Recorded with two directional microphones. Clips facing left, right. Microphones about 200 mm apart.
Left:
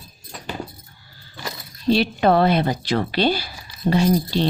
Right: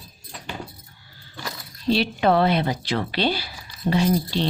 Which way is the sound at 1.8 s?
45° left (ahead or behind).